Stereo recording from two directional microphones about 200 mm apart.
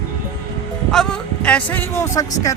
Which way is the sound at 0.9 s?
5° left (ahead or behind).